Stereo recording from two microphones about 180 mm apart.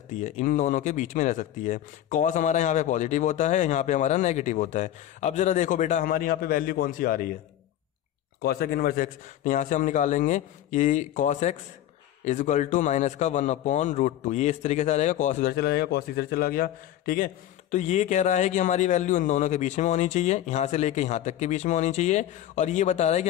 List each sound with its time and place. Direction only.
0.1 s speech: 45° left (ahead or behind)
8.4 s a man's voice: 60° left (ahead or behind); by 15.5 s 45° left (ahead or behind)
15.5 s a man's voice: 60° left (ahead or behind); by 23.2 s 40° left (ahead or behind)